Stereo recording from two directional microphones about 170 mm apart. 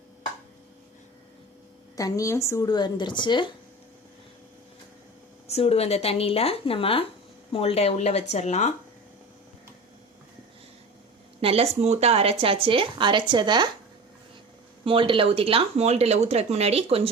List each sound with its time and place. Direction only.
2.0 s a woman's voice: 20° left (ahead or behind)
5.5 s speech: 35° left (ahead or behind)
11.3 s speech: 35° right (ahead or behind)
14.8 s speech: 30° right (ahead or behind)